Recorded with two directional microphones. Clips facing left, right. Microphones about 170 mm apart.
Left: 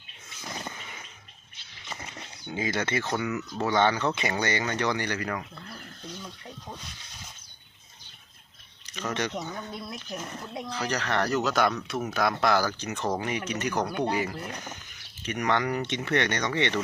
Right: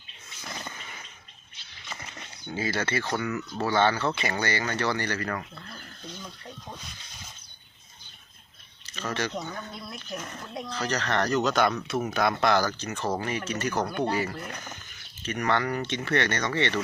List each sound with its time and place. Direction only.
1.9 s a sound: 20° left (ahead or behind)
3.1 s speech: 20° left (ahead or behind)
8.9 s speech: 15° left (ahead or behind)